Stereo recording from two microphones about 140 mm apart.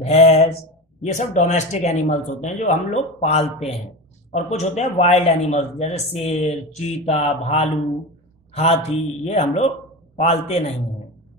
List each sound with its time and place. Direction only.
0.0 s speech: 45° left (ahead or behind)
1.1 s speech: 60° left (ahead or behind)